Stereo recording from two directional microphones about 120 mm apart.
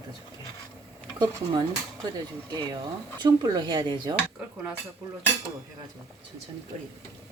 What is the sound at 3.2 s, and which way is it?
Speech, 35° right (ahead or behind).